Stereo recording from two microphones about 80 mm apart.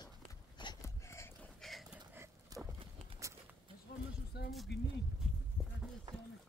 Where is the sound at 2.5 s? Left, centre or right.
Right.